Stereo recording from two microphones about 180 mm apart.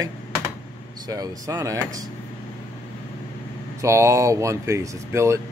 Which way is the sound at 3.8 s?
15° right (ahead or behind).